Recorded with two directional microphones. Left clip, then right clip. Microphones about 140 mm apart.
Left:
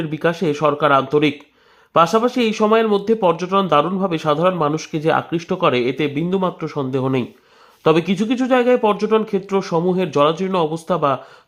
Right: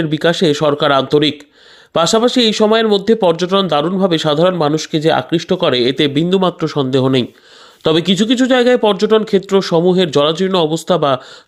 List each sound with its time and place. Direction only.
0.0 s speech: 30° right (ahead or behind)